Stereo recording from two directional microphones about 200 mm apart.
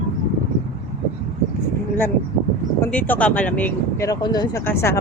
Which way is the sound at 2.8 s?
10° left (ahead or behind).